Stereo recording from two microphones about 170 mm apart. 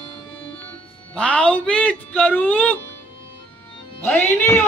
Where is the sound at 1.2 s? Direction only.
5° left (ahead or behind).